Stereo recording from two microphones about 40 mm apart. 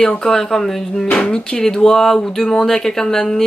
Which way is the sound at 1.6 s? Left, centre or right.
Centre.